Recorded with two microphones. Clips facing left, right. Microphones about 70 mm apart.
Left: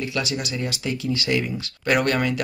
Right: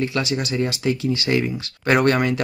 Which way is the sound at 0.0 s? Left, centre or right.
Right.